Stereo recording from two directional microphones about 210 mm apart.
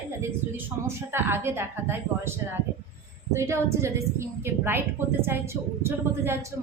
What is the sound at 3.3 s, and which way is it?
A woman's voice, 15° right (ahead or behind).